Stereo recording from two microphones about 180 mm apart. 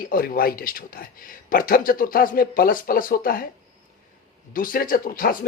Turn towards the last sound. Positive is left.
turn(degrees=50)  # may be behind; listen again after turning